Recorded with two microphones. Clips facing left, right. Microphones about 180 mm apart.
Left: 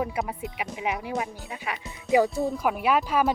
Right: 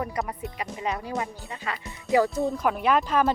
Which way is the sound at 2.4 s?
5° left (ahead or behind).